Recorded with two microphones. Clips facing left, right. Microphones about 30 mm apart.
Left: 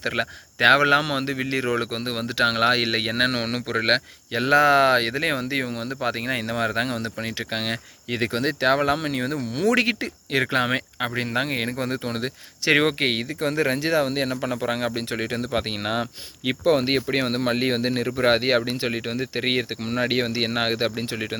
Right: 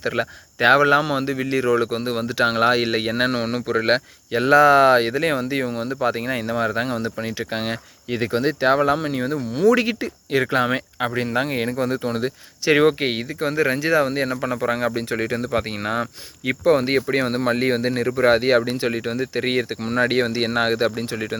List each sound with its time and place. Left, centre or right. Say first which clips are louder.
0.0 s speech: right 2 dB; left
1.3 s speech: right 4 dB; left
3.3 s speech: right 3 dB; left
3.8 s speech: right 1 dB; left
6.9 s speech: right 3 dB; left
8.1 s speech: right 3 dB; left
10.4 s speech: right 1 dB; left
11.2 s speech: right 2 dB; left
12.7 s speech: right 3 dB; left
16.6 s speech: right 3 dB; left
19.9 s speech: right 4 dB; centre; by 21.3 s left